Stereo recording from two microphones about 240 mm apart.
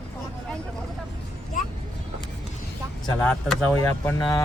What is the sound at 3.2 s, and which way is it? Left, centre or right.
Speech, centre.